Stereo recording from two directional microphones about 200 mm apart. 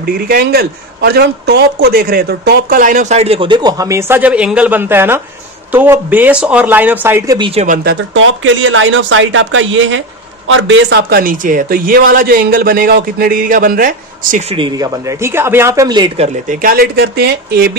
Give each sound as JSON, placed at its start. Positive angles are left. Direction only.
{"t": 0.0, "sound": "a man's voice", "side_deg": -50}
{"t": 7.3, "sound": "speech", "side_deg": -25}
{"t": 7.6, "sound": "a man's voice", "side_deg": -45}
{"t": 8.2, "sound": "a man's voice", "side_deg": -75}
{"t": 14.5, "sound": "speech", "side_deg": -20}
{"t": 16.4, "sound": "a man's voice", "side_deg": -45}